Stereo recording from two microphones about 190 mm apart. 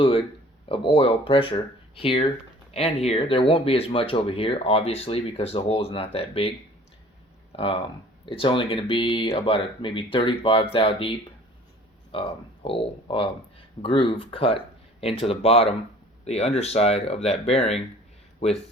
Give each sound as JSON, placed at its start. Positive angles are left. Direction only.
{"t": 0.0, "sound": "speech", "side_deg": 30}
{"t": 7.5, "sound": "speech", "side_deg": 30}